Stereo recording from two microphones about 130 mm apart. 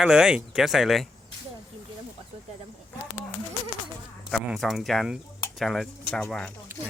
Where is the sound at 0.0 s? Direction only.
5° right (ahead or behind).